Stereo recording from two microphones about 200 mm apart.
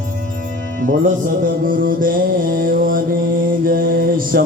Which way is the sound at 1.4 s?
45° right (ahead or behind).